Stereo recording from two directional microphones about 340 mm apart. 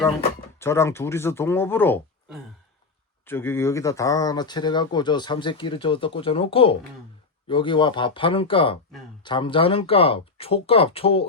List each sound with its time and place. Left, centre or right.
0.6 s speech: centre